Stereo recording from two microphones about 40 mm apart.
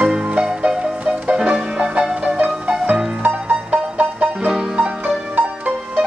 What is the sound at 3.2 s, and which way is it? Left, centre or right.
Music, right.